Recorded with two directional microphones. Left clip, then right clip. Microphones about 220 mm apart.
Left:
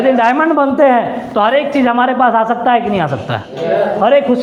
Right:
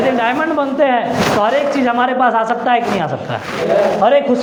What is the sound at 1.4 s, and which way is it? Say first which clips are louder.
A man's voice: left 7 dB; 40° left (ahead or behind).